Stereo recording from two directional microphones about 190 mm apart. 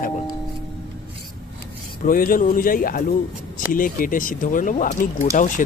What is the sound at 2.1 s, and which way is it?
Speech, 45° left (ahead or behind).